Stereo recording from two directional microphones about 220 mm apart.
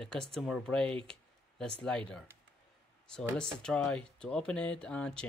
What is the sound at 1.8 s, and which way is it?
Speech, 5° left (ahead or behind).